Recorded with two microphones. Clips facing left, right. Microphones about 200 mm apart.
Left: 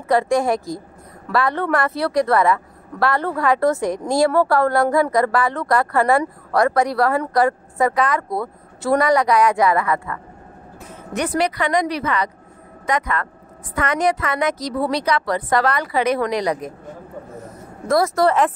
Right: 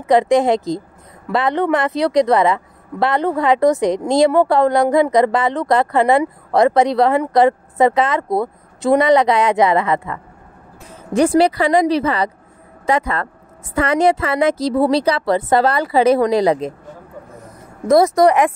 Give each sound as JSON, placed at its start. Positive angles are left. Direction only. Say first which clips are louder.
{"t": 0.0, "sound": "a woman's voice", "louder": "right 4 dB", "side_deg": -20}
{"t": 11.1, "sound": "a woman's voice", "louder": "right 7 dB", "side_deg": -30}
{"t": 17.8, "sound": "a woman's voice", "louder": "right 5 dB", "side_deg": -20}